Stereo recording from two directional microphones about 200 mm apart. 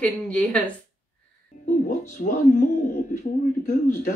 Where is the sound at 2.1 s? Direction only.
40° left (ahead or behind).